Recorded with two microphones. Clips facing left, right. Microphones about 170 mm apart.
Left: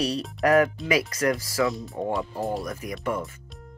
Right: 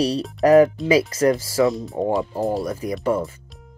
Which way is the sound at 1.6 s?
Centre (ahead or behind).